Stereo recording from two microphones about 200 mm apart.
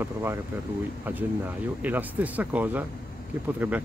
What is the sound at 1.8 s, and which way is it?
Speech, 10° right (ahead or behind).